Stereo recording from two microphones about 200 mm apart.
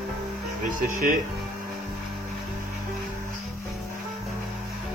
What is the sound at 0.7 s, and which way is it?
Speech, 45° right (ahead or behind).